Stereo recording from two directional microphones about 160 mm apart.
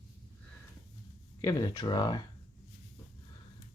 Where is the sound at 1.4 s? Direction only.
25° left (ahead or behind).